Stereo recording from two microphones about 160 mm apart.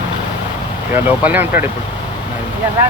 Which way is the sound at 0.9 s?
10° right (ahead or behind).